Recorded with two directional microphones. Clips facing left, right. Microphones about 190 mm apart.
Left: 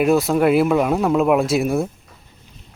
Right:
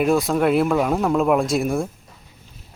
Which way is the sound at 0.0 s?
Centre (ahead or behind).